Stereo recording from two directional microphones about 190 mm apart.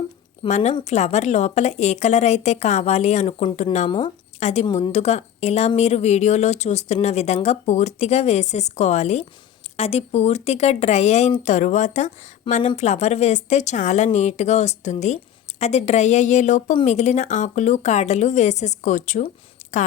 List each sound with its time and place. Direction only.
0.4 s a woman's voice: 40° left (ahead or behind)